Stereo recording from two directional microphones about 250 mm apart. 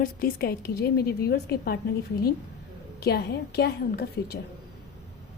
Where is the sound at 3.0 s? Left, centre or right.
Left.